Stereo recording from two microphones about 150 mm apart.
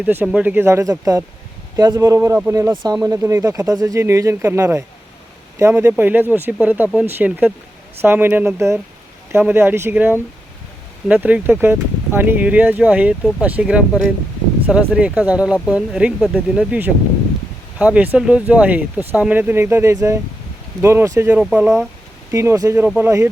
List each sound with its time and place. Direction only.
0.0 s speech: 15° right (ahead or behind)